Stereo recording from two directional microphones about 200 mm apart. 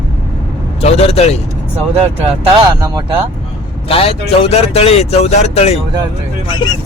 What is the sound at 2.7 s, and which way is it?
Speech, 20° right (ahead or behind).